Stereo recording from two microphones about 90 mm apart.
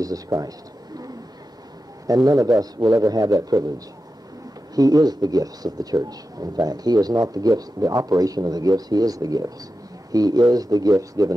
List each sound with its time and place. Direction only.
0.0 s speech: 40° right (ahead or behind)